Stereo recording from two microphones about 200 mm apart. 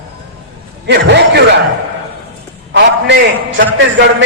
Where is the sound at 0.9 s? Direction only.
60° right (ahead or behind).